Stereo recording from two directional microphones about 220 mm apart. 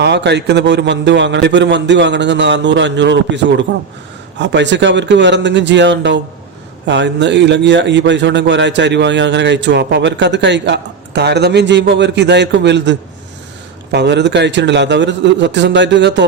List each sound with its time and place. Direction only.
0.0 s speech: 50° right (ahead or behind)